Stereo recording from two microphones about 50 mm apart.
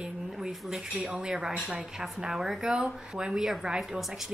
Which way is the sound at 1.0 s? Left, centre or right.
Right.